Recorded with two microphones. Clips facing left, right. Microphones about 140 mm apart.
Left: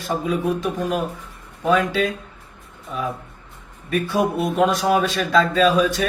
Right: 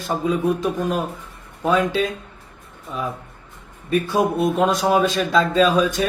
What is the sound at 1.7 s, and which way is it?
Speech, 30° right (ahead or behind).